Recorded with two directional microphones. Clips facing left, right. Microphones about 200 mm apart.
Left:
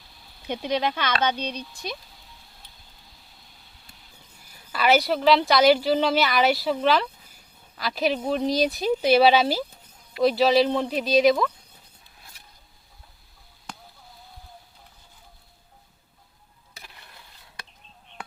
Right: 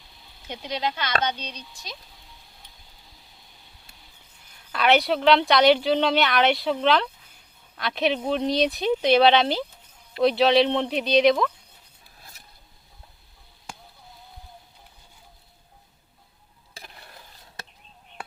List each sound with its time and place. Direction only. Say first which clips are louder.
0.4 s speech: left 4 dB; 55° left (ahead or behind)
4.4 s a woman's voice: even; 5° left (ahead or behind)